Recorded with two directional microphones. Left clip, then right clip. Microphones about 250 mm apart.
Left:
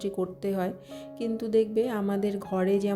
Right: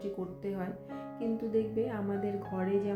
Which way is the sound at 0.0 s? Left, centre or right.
Left.